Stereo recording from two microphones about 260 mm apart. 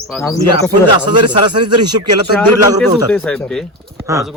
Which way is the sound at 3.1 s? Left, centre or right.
Centre.